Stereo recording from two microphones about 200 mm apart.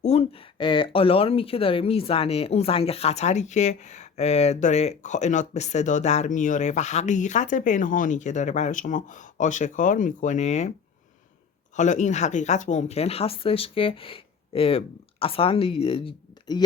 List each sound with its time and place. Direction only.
0.0 s speech: 30° left (ahead or behind)
11.8 s speech: 35° left (ahead or behind)